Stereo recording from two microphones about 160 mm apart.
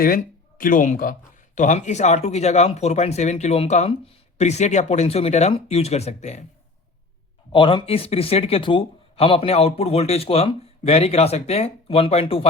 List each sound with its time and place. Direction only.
0.6 s a man's voice: 55° left (ahead or behind)
7.5 s speech: 30° left (ahead or behind)